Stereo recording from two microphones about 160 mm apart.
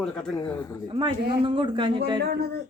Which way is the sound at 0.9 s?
30° right (ahead or behind).